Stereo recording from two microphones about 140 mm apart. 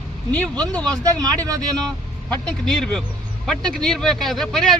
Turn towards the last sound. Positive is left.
turn(degrees=5)  # may be behind; listen again after turning